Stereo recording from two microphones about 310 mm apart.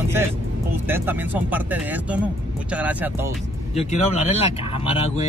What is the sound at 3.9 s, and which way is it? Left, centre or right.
Speech, centre.